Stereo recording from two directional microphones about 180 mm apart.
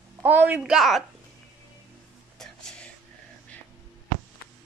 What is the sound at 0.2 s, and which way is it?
Speech, 10° right (ahead or behind).